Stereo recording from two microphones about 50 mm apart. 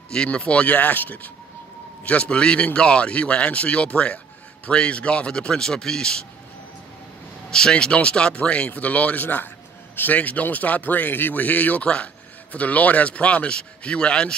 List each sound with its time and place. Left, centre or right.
0.1 s a man's voice: centre; by 1.3 s left
2.0 s a man's voice: left
7.5 s a man's voice: centre